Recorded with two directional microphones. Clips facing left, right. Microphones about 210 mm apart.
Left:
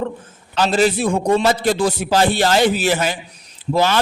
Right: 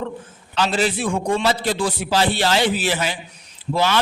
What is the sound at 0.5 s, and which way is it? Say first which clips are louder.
A man's voice: left 4 dB; 45° left (ahead or behind).